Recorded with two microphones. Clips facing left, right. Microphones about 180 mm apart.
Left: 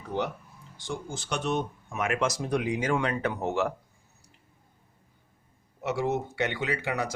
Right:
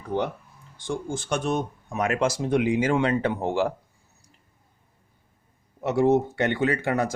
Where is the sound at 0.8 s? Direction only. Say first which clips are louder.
Right 6 dB; 50° right (ahead or behind); by 3.7 s 30° right (ahead or behind).